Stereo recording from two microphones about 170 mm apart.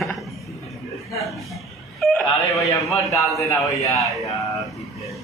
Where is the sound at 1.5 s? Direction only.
Centre (ahead or behind).